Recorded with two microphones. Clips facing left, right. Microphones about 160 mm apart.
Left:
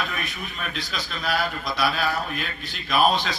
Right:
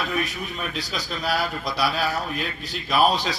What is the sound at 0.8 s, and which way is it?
Speech, 35° right (ahead or behind).